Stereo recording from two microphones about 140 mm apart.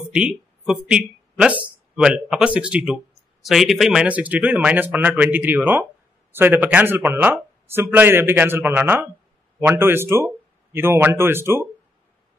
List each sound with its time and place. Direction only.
0.1 s a man's voice: 5° right (ahead or behind)